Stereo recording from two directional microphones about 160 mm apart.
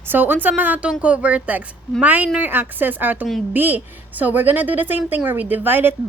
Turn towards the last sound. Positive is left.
turn(degrees=-10)  # may be behind; listen again after turning